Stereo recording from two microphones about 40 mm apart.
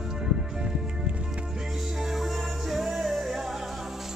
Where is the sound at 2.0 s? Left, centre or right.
Centre.